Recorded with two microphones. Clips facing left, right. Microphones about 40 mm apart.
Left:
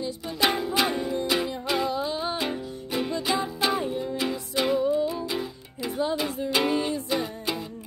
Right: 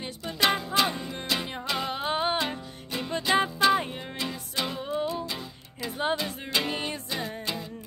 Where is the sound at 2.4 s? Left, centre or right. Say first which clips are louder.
Left 3 dB; centre.